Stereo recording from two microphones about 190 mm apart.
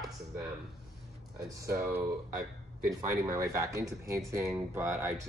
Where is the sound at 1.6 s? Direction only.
15° right (ahead or behind).